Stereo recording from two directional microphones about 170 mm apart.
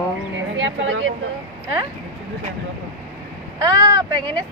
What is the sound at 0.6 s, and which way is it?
Speech, 90° right.